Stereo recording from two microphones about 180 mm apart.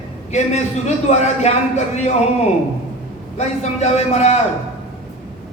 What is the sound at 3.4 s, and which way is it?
Speech, 35° left (ahead or behind).